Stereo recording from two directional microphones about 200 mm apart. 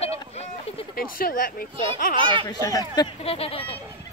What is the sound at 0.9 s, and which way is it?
Speech, 45° left (ahead or behind).